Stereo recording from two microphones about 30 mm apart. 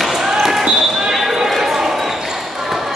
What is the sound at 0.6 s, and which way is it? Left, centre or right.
Basketball bounce, right.